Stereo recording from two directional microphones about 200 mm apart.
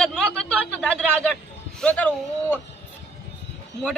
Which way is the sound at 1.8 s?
5° left (ahead or behind).